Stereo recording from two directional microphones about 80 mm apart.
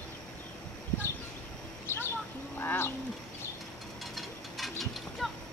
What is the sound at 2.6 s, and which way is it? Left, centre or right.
Bird, left.